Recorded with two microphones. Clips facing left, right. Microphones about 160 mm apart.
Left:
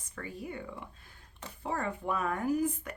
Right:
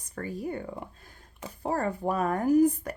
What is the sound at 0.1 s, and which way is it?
Speech, 40° right (ahead or behind).